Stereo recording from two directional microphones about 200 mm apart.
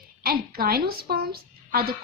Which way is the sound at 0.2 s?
50° right (ahead or behind).